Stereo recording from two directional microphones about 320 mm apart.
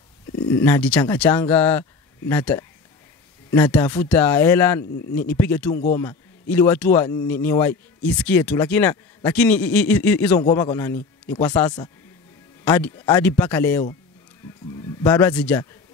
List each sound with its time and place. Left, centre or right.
0.5 s a man's voice: centre
15.0 s a man's voice: centre